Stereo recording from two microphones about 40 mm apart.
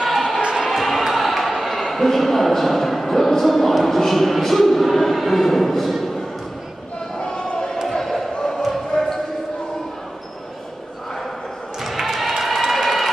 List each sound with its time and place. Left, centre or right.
0.0 s music: centre
0.4 s music: right
0.7 s music: centre
1.9 s speech: centre
7.9 s basketball bounce: centre
8.4 s a sound: centre
8.6 s basketball bounce: centre
11.8 s a sound: centre
12.4 s crowd: centre